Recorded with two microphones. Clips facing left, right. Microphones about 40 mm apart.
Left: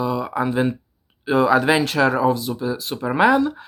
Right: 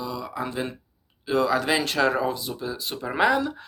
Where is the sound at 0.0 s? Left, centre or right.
Left.